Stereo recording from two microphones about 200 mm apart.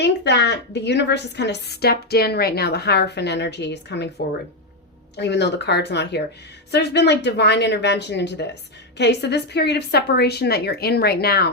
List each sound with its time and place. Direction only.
0.0 s a woman's voice: 55° left (ahead or behind)
5.1 s a woman's voice: 60° left (ahead or behind)